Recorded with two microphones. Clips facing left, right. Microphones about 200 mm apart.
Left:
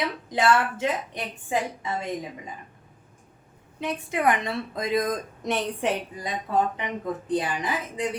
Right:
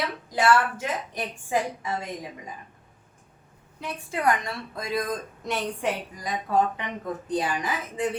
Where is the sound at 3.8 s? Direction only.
20° left (ahead or behind).